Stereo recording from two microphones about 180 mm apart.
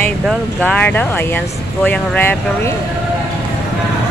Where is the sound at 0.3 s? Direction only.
5° left (ahead or behind).